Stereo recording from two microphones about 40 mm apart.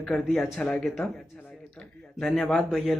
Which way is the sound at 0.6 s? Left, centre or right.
Left.